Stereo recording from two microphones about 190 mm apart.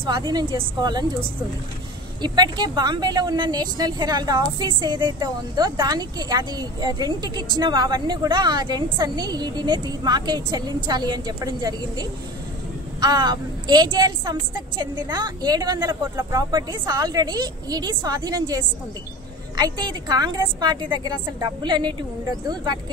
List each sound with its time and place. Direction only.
0.3 s a woman's voice: 20° right (ahead or behind)
2.2 s a woman's voice: 20° right (ahead or behind)